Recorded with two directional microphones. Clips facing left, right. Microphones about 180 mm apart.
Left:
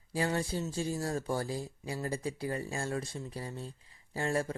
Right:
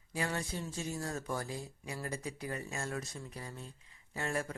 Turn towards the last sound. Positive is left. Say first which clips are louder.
# left 5 dB
turn(degrees=30)  # may be behind; listen again after turning